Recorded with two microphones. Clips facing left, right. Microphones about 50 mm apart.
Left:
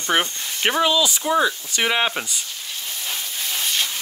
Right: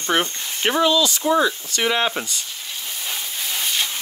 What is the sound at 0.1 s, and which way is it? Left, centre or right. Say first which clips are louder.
Speech: left 1 dB; centre.